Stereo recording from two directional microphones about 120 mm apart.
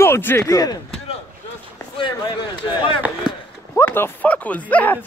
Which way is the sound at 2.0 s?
45° left (ahead or behind).